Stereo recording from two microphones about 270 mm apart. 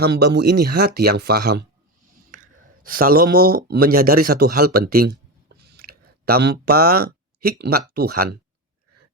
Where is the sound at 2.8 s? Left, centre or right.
Right.